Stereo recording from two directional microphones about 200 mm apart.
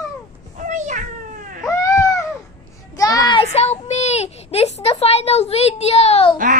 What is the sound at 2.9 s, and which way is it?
Child singing, 20° left (ahead or behind).